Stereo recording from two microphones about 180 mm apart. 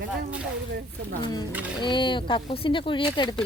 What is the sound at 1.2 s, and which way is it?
Speech, 20° left (ahead or behind).